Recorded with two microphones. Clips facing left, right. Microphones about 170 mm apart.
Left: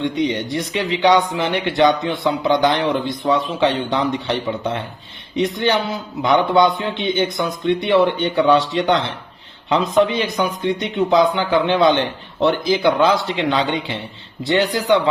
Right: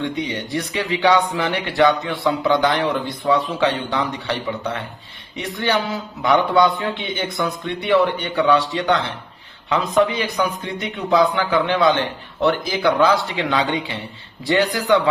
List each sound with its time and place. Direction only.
0.3 s a man's voice: 20° left (ahead or behind)